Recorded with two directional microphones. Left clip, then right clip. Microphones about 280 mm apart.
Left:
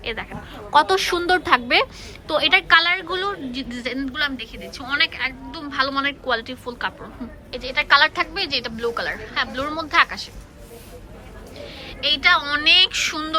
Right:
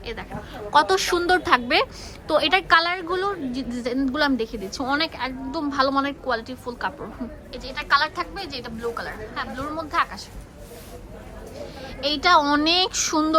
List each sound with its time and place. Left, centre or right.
0.0 s a woman's voice: centre
11.6 s a woman's voice: centre